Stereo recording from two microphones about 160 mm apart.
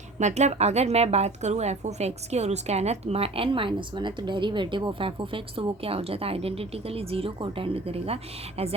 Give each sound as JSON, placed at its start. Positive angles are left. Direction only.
{"t": 0.2, "sound": "a woman's voice", "side_deg": -45}